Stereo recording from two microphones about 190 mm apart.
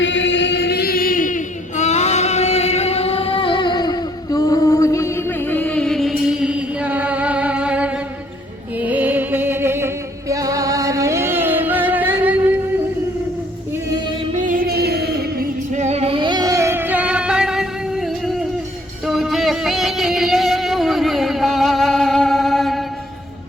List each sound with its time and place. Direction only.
0.0 s chant: 75° left (ahead or behind); by 7.9 s 5° right (ahead or behind)
8.8 s music: 10° right (ahead or behind)
14.4 s music: 50° right (ahead or behind)
15.7 s music: 35° right (ahead or behind); by 22.8 s centre (ahead or behind)